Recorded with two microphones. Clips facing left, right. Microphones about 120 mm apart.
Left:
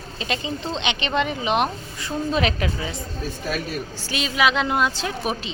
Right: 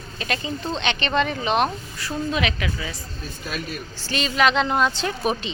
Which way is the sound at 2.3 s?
40° left (ahead or behind).